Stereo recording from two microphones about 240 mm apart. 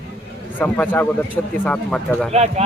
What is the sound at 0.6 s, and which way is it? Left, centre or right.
Speech, centre.